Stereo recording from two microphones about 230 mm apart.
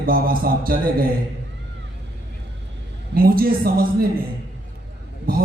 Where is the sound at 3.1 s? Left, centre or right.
Right.